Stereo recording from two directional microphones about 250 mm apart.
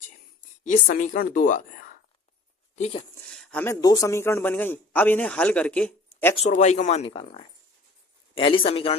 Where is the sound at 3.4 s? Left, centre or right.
Centre.